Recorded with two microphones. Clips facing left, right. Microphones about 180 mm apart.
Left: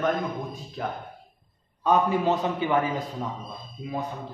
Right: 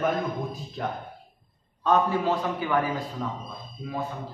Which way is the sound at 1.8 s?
20° left (ahead or behind).